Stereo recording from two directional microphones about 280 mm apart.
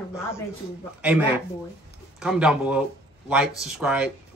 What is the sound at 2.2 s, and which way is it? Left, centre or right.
Speech, centre.